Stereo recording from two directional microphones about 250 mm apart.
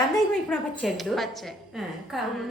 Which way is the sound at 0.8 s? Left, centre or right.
Centre.